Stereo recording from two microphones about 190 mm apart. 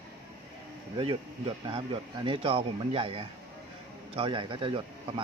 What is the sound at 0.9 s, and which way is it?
A man's voice, 30° right (ahead or behind).